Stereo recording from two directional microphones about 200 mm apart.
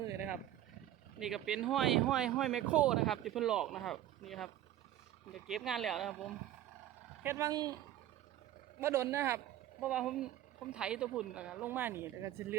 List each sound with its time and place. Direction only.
1.2 s speech: 5° right (ahead or behind)
7.2 s speech: 15° right (ahead or behind)
8.8 s speech: 15° right (ahead or behind)